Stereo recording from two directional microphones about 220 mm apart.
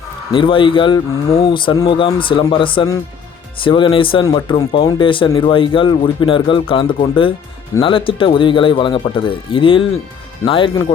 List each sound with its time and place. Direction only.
0.3 s speech: 20° left (ahead or behind)